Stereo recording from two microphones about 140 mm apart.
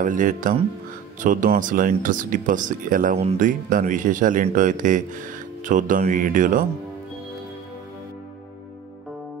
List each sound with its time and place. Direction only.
0.0 s speech: 70° right (ahead or behind)